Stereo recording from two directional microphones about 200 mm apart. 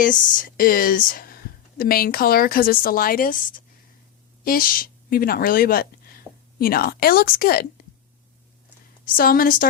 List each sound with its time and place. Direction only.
0.0 s a woman's voice: 40° left (ahead or behind)
9.0 s speech: 45° left (ahead or behind)